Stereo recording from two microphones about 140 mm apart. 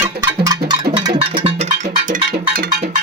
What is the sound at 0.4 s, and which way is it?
Music, 35° right (ahead or behind).